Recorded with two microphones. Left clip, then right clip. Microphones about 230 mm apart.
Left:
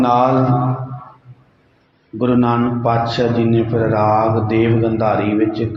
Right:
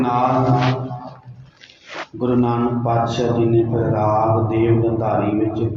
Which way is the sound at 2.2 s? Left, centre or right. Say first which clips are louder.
Left 3 dB; left.